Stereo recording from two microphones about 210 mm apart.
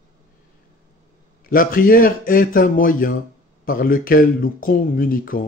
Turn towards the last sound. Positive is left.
turn(degrees=40)  # may be behind; listen again after turning